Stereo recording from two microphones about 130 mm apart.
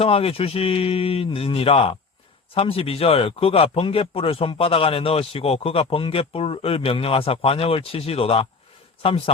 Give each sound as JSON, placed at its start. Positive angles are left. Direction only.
{"t": 0.0, "sound": "speech", "side_deg": 50}